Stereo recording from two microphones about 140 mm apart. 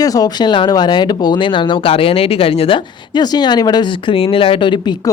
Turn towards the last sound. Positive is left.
turn(degrees=30)  # may be behind; listen again after turning